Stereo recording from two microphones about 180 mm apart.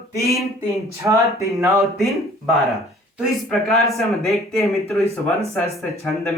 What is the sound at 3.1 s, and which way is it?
Speech, centre (ahead or behind).